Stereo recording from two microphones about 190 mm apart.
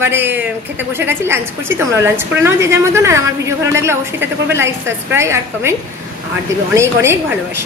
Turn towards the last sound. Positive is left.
turn(degrees=-15)  # may be behind; listen again after turning